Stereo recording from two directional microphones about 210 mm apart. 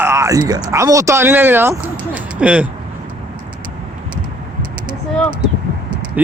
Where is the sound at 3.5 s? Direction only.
20° right (ahead or behind).